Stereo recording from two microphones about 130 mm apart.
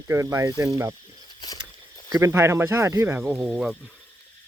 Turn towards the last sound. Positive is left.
turn(degrees=-10)  # may be behind; listen again after turning